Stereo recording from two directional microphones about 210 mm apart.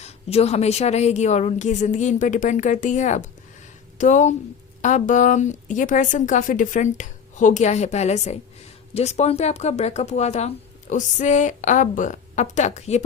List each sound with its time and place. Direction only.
0.0 s speech: 30° left (ahead or behind)